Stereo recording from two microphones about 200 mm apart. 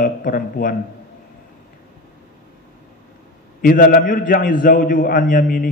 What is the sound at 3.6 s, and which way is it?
A man's voice, 45° left (ahead or behind).